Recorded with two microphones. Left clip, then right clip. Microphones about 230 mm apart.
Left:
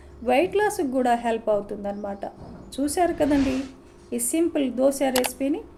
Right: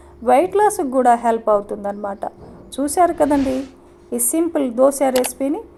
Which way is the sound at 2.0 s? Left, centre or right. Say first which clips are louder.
Right 6 dB; centre.